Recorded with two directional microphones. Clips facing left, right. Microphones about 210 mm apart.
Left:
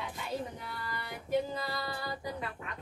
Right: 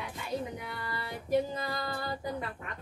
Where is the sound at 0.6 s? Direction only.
20° right (ahead or behind).